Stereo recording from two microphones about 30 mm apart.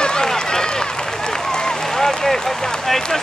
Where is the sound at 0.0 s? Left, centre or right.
Left.